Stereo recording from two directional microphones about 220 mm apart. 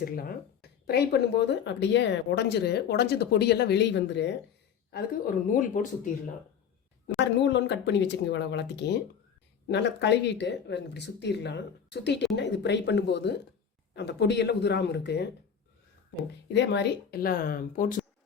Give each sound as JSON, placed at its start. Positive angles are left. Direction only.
{"t": 0.0, "sound": "speech", "side_deg": 40}
{"t": 7.2, "sound": "speech", "side_deg": 50}
{"t": 16.5, "sound": "speech", "side_deg": 50}